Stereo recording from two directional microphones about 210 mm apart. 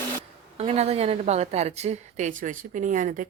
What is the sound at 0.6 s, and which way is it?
A woman's voice, 30° right (ahead or behind).